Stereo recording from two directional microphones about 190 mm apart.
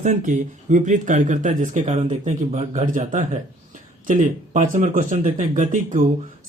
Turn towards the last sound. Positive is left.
turn(degrees=-45)  # may be behind; listen again after turning